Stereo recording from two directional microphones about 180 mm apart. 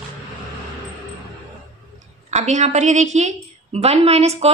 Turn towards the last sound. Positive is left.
turn(degrees=-35)  # may be behind; listen again after turning